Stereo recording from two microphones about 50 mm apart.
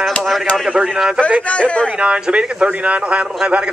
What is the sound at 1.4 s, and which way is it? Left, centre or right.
Speech, left.